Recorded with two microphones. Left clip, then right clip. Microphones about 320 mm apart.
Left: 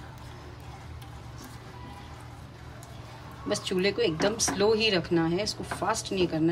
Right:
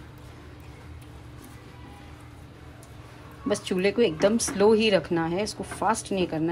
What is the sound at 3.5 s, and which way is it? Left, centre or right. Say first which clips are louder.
Speech: right 2 dB; centre.